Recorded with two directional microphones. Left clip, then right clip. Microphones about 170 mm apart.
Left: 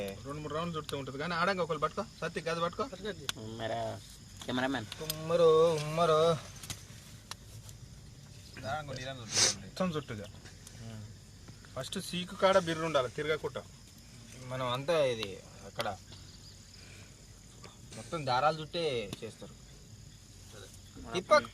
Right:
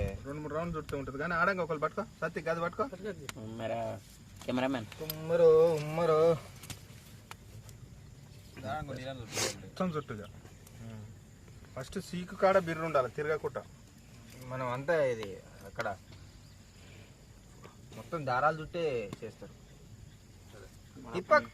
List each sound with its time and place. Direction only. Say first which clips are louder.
0.3 s speech: even; 10° left (ahead or behind)
2.9 s speech: left 1 dB; 60° right (ahead or behind)
3.3 s speech: even; 40° right (ahead or behind)
4.9 s speech: right 1 dB; 5° right (ahead or behind)
8.6 s speech: left 1 dB; 55° right (ahead or behind)
9.3 s speech: left 6 dB; 5° right (ahead or behind)
9.7 s speech: even; 10° left (ahead or behind)
11.7 s speech: left 3 dB; 10° left (ahead or behind)
14.4 s speech: even; 5° right (ahead or behind)
15.6 s a sound: even; centre (ahead or behind)
17.6 s speech: left 1 dB; 5° right (ahead or behind)